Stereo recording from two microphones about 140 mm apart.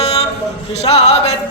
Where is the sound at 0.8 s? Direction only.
50° left (ahead or behind).